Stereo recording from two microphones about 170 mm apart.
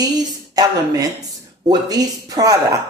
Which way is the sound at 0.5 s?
20° right (ahead or behind).